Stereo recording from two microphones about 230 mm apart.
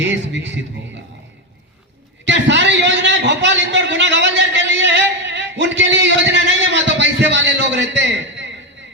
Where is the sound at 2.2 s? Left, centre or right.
Right.